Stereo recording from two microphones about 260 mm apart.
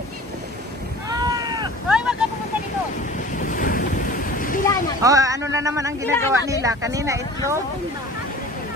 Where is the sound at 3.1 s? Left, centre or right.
Left.